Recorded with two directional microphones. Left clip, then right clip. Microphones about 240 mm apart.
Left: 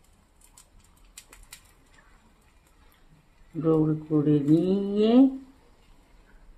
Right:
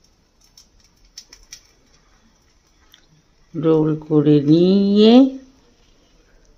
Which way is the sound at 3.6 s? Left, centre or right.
Right.